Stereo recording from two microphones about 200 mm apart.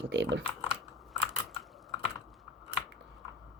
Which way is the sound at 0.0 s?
60° right (ahead or behind).